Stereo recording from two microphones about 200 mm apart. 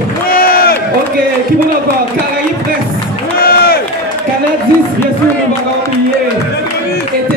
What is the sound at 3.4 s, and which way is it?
Crowd, 50° left (ahead or behind).